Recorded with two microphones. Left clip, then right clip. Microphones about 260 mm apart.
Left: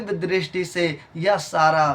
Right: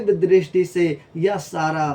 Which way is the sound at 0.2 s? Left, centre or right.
Centre.